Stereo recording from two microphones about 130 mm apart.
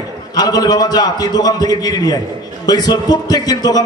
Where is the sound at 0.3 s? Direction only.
30° left (ahead or behind).